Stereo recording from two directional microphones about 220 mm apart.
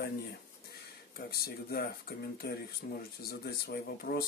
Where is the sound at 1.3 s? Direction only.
45° left (ahead or behind).